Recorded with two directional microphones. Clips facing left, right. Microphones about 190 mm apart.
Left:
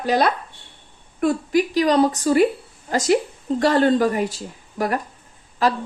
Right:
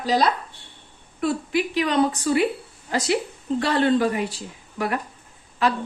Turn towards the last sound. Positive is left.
turn(degrees=40)  # may be behind; listen again after turning